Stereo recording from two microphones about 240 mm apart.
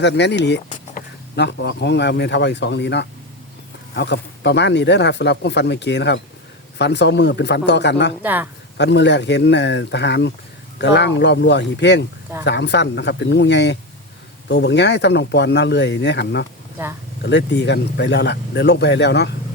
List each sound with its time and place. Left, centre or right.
0.0 s speech: left
8.2 s speech: centre
8.8 s speech: left